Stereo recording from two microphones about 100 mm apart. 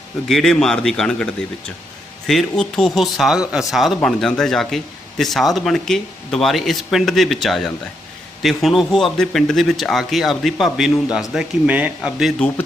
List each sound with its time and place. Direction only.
0.3 s speech: 5° left (ahead or behind); by 12.1 s 15° right (ahead or behind)